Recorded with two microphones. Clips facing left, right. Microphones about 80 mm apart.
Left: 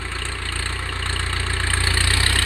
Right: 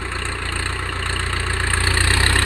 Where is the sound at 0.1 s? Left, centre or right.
Right.